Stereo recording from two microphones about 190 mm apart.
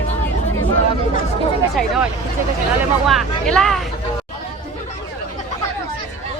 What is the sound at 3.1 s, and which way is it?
Speech, centre (ahead or behind).